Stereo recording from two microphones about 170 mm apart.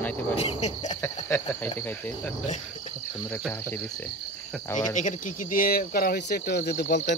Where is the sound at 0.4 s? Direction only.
40° left (ahead or behind).